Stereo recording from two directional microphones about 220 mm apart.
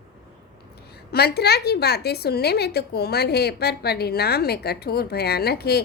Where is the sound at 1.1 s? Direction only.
45° left (ahead or behind).